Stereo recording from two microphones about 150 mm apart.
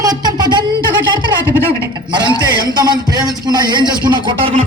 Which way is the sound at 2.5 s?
30° right (ahead or behind).